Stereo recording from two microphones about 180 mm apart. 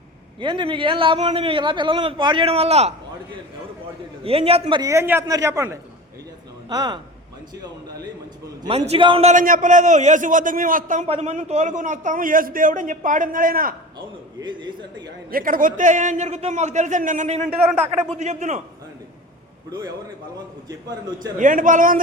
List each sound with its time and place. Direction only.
0.3 s a man's voice: 25° right (ahead or behind)
4.2 s a man's voice: 30° right (ahead or behind)
4.8 s a man's voice: 15° right (ahead or behind)
9.3 s a man's voice: 50° right (ahead or behind)
11.0 s a man's voice: 35° right (ahead or behind); by 13.7 s 55° right (ahead or behind)
14.4 s a man's voice: 25° right (ahead or behind)
15.0 s a man's voice: 55° right (ahead or behind); by 18.6 s 40° right (ahead or behind)
21.3 s a man's voice: 45° right (ahead or behind)